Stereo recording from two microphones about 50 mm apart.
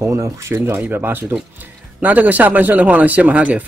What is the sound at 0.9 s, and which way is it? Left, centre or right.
Speech, right.